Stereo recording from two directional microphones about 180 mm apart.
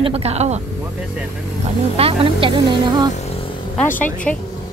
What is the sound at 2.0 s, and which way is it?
Speech, 30° right (ahead or behind).